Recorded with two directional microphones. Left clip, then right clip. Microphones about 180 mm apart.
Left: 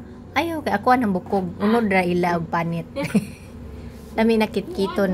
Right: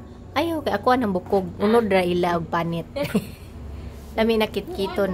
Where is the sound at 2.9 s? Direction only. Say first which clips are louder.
Even; 25° right (ahead or behind).